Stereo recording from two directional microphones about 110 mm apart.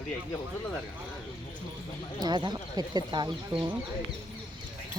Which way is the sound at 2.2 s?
40° right (ahead or behind).